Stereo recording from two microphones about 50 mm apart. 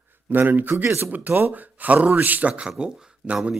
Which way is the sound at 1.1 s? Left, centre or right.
Right.